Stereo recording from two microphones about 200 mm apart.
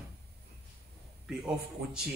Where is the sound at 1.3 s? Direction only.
5° right (ahead or behind).